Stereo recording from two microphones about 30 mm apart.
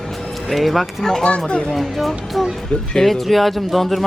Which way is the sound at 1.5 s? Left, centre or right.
Left.